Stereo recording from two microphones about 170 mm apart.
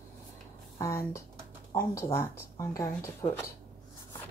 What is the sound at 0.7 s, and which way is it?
Speech, 20° left (ahead or behind).